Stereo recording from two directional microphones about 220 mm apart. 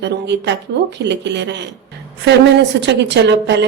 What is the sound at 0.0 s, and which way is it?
A woman's voice, 50° right (ahead or behind).